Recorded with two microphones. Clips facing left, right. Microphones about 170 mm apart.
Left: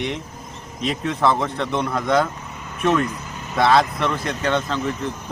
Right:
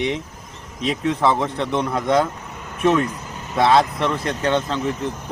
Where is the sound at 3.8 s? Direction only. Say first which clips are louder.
Right 1 dB; 30° right (ahead or behind).